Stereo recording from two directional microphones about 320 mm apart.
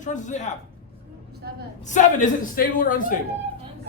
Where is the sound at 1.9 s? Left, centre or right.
Left.